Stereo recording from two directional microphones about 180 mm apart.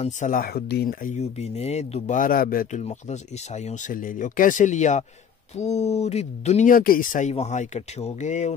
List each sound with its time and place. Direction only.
0.0 s speech: 45° left (ahead or behind)
2.8 s speech: 40° left (ahead or behind)